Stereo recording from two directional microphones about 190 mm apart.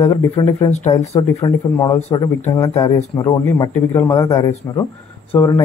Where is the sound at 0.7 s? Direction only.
35° left (ahead or behind).